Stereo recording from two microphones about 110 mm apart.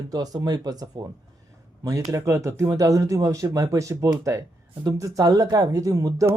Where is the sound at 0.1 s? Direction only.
35° right (ahead or behind).